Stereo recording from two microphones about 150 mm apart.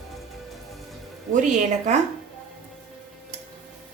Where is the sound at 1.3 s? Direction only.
55° right (ahead or behind).